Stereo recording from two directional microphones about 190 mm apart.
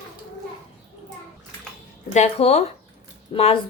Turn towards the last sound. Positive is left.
turn(degrees=30)  # may be behind; listen again after turning